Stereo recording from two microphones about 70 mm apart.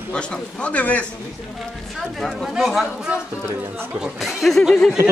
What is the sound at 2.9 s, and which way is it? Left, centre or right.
Speech, centre.